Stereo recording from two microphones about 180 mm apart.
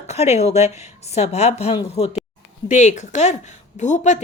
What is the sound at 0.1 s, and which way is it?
A woman's voice, 40° left (ahead or behind).